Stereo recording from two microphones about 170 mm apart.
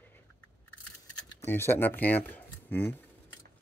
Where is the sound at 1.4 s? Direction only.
15° left (ahead or behind).